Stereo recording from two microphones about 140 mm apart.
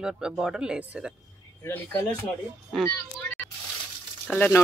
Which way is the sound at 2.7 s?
Centre (ahead or behind).